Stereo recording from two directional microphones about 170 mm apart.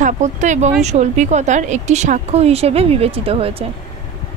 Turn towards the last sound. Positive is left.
turn(degrees=-35)  # may be behind; listen again after turning